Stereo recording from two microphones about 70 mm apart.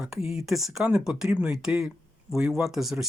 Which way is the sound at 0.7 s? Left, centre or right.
Centre.